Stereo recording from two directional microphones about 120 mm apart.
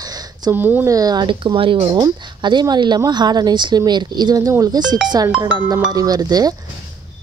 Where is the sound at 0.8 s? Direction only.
30° right (ahead or behind).